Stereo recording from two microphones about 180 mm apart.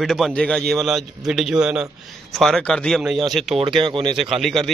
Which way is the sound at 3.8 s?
30° right (ahead or behind).